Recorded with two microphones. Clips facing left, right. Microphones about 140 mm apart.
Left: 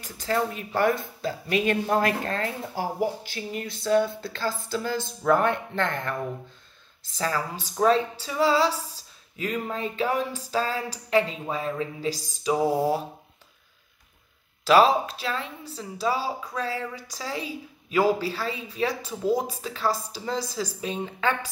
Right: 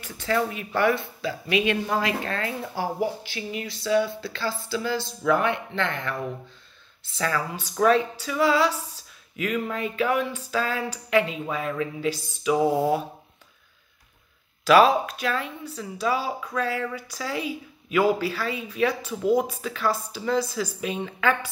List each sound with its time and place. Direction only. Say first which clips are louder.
0.0 s speech: right 1 dB; 40° left (ahead or behind)
7.2 s speech: right 1 dB; 30° left (ahead or behind)
14.6 s speech: right 1 dB; 30° left (ahead or behind)